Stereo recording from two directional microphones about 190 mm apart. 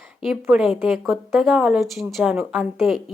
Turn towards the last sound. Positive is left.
turn(degrees=0)  # may be behind; listen again after turning